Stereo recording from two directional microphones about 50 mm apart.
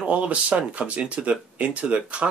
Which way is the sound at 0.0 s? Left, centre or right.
Right.